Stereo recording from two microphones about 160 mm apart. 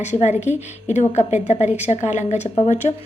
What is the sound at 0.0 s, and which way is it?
A woman's voice, 45° left (ahead or behind).